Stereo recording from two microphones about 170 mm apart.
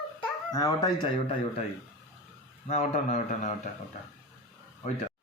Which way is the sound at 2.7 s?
45° left (ahead or behind).